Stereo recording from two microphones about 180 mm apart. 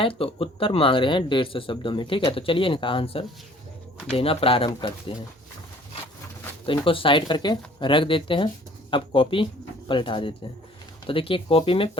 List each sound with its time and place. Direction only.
0.0 s speech: 30° left (ahead or behind)
6.7 s speech: 30° left (ahead or behind)